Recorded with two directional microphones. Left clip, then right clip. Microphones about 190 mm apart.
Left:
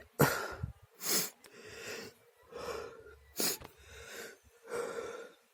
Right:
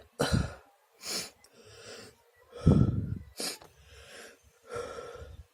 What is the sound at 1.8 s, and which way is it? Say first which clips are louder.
Wheeze: left 3 dB; 25° left (ahead or behind).